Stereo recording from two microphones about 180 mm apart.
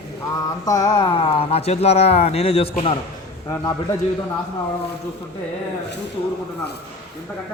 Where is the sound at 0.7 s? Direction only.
20° left (ahead or behind).